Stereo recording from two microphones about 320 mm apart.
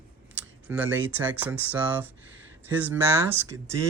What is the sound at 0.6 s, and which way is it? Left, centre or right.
Speech, centre.